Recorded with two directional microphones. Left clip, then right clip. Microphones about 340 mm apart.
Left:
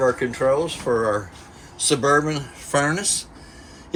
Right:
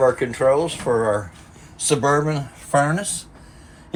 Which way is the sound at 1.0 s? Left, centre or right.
Right.